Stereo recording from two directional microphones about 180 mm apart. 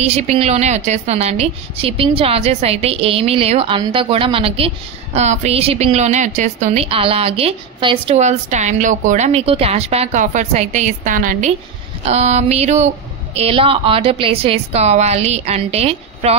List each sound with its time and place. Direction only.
0.0 s a woman's voice: 40° right (ahead or behind)
8.2 s a woman's voice: 40° right (ahead or behind)